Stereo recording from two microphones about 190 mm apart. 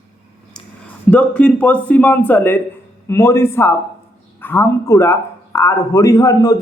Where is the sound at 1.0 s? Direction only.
5° left (ahead or behind).